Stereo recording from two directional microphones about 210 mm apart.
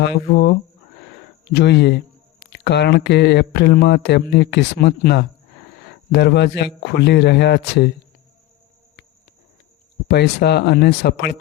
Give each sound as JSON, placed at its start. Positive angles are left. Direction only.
{"t": 0.0, "sound": "speech", "side_deg": 55}
{"t": 1.5, "sound": "speech", "side_deg": 55}
{"t": 10.1, "sound": "speech", "side_deg": 50}